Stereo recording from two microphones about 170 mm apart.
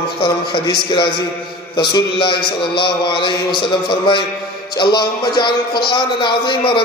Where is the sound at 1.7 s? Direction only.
25° left (ahead or behind).